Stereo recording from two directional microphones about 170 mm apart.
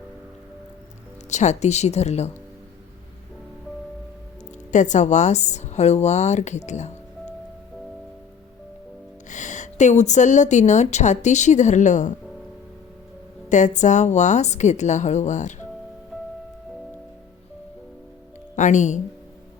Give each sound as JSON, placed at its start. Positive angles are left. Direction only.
{"t": 1.3, "sound": "speech", "side_deg": 45}
{"t": 4.7, "sound": "speech", "side_deg": 45}
{"t": 9.3, "sound": "a woman's voice", "side_deg": 45}
{"t": 13.5, "sound": "a woman's voice", "side_deg": 45}
{"t": 16.1, "sound": "music", "side_deg": -5}
{"t": 18.5, "sound": "speech", "side_deg": 45}